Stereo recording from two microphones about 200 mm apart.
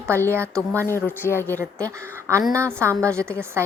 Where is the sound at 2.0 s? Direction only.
15° right (ahead or behind).